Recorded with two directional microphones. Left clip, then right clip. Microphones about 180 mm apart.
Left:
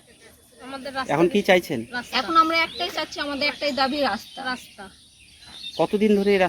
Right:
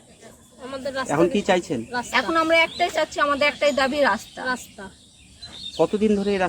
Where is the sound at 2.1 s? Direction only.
5° right (ahead or behind).